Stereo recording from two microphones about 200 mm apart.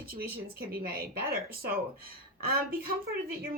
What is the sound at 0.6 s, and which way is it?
Speech, 50° right (ahead or behind).